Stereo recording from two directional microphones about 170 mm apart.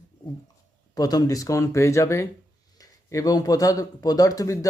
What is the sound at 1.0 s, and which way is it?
Speech, 20° left (ahead or behind).